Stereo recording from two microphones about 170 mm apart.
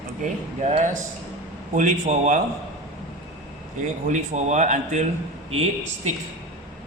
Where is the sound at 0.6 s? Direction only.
45° right (ahead or behind).